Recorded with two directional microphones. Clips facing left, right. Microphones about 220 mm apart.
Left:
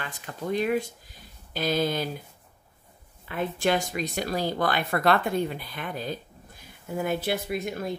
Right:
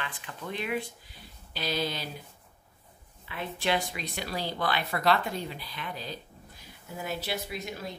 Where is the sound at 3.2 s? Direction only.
50° left (ahead or behind).